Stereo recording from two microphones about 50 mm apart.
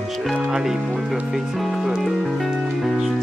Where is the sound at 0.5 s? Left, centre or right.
Centre.